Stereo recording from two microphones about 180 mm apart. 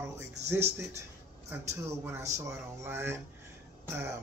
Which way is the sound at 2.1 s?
15° right (ahead or behind).